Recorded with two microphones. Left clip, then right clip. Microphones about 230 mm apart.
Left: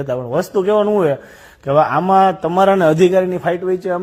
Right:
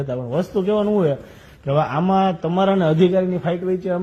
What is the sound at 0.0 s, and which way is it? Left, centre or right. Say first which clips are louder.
A man's voice: left 5 dB; left.